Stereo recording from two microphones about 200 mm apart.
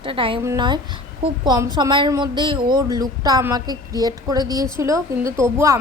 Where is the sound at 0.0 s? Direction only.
25° right (ahead or behind).